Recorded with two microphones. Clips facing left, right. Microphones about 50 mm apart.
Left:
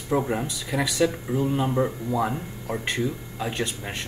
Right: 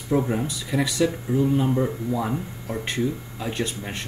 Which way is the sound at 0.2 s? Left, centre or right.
Centre.